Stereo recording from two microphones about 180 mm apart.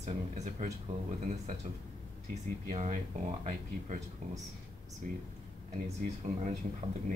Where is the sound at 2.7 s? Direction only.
40° right (ahead or behind).